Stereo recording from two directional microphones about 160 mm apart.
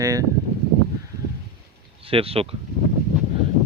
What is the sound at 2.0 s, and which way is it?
Speech, 35° right (ahead or behind).